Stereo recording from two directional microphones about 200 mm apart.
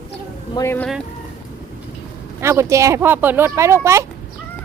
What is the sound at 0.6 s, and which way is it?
Speech, 10° left (ahead or behind).